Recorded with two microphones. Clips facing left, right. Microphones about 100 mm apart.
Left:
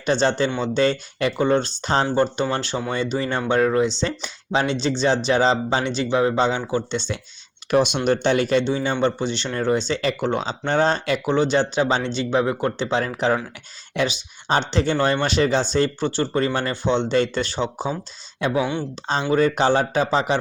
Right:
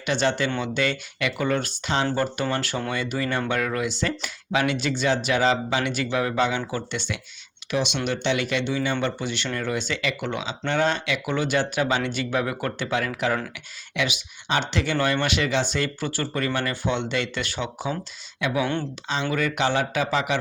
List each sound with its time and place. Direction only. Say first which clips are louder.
0.0 s speech: left 4 dB; 35° left (ahead or behind)
7.7 s speech: left 7 dB; 45° left (ahead or behind)
11.3 s speech: left 4 dB; 30° left (ahead or behind)
18.6 s speech: left 1 dB; 10° left (ahead or behind)
19.3 s speech: left 7 dB; 30° left (ahead or behind)